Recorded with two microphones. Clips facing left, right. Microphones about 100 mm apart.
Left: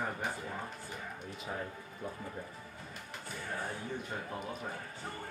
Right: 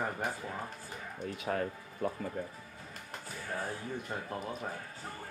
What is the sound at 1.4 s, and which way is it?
Speech, 75° right (ahead or behind).